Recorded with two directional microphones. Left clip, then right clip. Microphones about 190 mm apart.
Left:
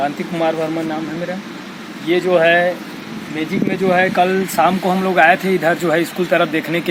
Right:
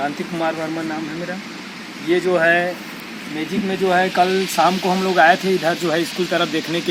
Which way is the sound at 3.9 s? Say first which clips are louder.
Left 2 dB; 15° left (ahead or behind).